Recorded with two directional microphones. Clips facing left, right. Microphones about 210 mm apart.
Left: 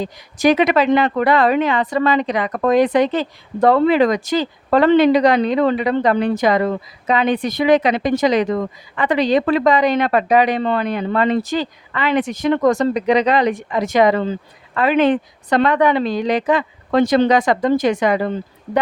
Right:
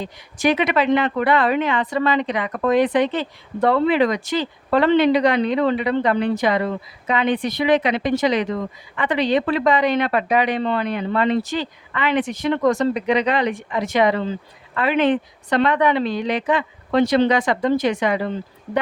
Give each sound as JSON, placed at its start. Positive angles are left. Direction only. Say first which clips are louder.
{"t": 0.0, "sound": "speech", "louder": "left 4 dB", "side_deg": 40}